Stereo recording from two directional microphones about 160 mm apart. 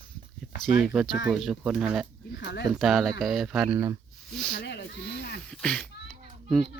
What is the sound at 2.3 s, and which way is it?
Speech, 90° left.